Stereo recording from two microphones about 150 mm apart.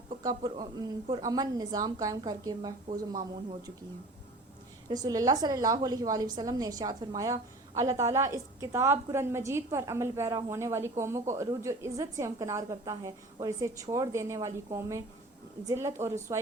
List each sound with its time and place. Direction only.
0.2 s a woman's voice: 25° right (ahead or behind)
4.9 s a woman's voice: 25° right (ahead or behind)